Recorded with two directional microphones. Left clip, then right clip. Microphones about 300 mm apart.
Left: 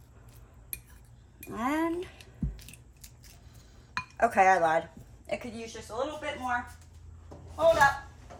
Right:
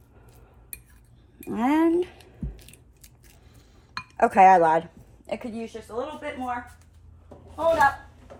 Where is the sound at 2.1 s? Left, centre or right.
Centre.